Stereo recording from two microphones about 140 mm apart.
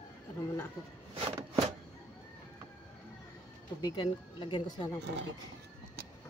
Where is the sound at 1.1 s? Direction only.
45° right (ahead or behind).